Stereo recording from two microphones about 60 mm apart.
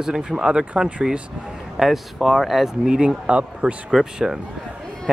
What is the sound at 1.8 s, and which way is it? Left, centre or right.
Speech, centre.